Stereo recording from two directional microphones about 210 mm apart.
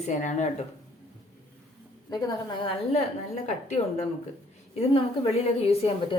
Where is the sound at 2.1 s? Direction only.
20° left (ahead or behind).